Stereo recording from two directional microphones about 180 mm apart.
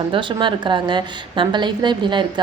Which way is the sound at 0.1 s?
25° right (ahead or behind).